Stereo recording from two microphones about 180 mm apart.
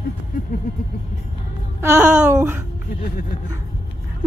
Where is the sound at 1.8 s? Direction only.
15° right (ahead or behind).